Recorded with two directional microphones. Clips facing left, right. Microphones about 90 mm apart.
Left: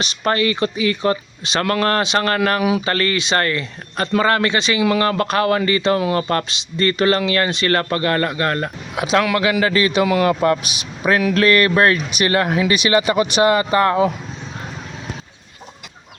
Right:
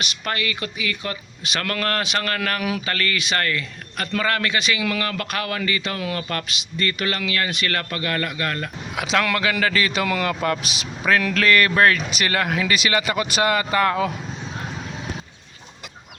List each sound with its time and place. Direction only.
0.0 s a man's voice: 30° left (ahead or behind)
9.2 s a man's voice: 15° left (ahead or behind)
10.6 s speech: 30° right (ahead or behind)
11.0 s a man's voice: 15° left (ahead or behind)